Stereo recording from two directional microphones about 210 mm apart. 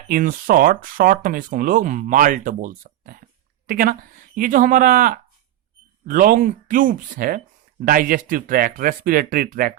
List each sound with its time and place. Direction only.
0.1 s speech: 40° right (ahead or behind)